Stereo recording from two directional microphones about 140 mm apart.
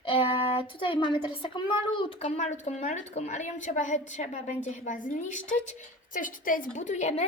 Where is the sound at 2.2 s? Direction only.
50° left (ahead or behind).